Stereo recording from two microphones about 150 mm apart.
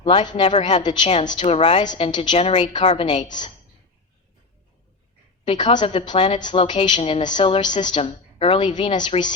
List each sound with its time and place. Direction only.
0.0 s a woman's voice: 35° left (ahead or behind)
2.3 s a woman's voice: 50° left (ahead or behind)
2.9 s a woman's voice: 35° left (ahead or behind)
5.5 s a woman's voice: 30° left (ahead or behind)